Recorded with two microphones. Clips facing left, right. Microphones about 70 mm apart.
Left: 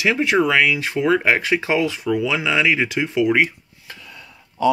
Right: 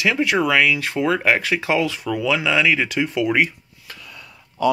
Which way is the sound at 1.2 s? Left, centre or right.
Centre.